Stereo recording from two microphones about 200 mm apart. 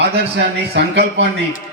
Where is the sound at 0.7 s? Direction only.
55° right (ahead or behind).